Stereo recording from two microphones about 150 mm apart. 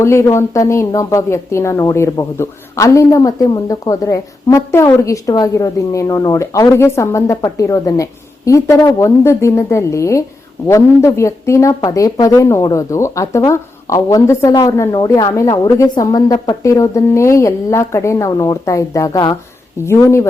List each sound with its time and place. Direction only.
0.0 s a woman's voice: 20° left (ahead or behind)